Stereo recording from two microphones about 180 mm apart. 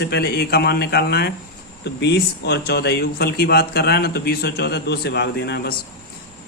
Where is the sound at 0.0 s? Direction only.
65° left (ahead or behind).